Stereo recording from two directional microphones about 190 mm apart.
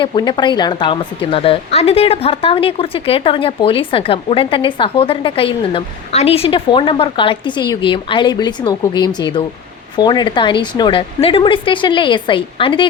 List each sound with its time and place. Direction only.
0.0 s a woman's voice: 25° left (ahead or behind)